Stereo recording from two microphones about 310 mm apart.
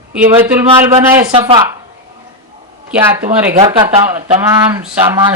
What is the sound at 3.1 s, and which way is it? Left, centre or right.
Speech, centre.